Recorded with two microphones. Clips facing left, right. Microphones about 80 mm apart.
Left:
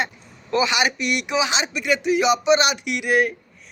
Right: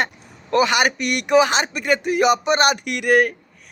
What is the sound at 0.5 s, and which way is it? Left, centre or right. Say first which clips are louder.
Speech: right 3 dB; right.